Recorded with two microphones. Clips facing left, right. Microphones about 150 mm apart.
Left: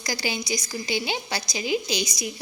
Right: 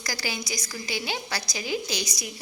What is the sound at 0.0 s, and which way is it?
A woman's voice, 20° left (ahead or behind).